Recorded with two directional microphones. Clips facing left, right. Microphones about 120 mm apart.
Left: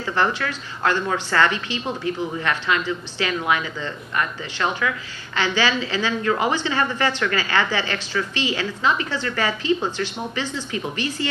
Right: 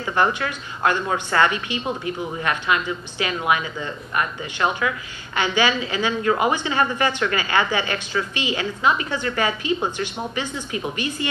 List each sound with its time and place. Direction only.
0.1 s a woman's voice: 20° right (ahead or behind)